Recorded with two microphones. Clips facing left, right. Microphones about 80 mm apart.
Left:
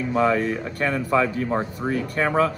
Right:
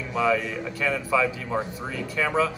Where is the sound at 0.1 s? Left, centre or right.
Left.